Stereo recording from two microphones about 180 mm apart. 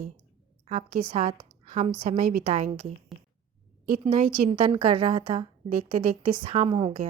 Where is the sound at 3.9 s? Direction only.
35° right (ahead or behind).